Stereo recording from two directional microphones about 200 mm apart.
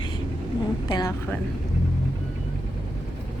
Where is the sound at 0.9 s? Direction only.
20° left (ahead or behind).